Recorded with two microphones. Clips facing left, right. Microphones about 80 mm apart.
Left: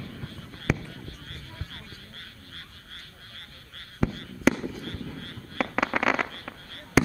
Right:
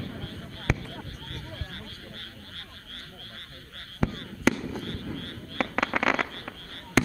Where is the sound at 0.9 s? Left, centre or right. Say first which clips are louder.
Right 2 dB; right.